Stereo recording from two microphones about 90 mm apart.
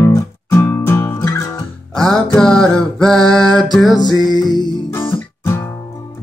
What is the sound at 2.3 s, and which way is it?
Music, 5° left (ahead or behind).